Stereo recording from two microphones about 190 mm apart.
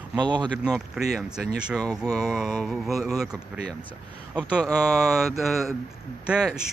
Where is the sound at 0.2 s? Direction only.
25° right (ahead or behind).